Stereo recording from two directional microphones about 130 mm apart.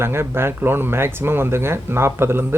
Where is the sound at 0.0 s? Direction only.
20° right (ahead or behind).